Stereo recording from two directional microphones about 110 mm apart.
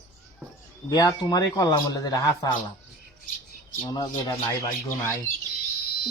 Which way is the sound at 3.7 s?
35° left (ahead or behind).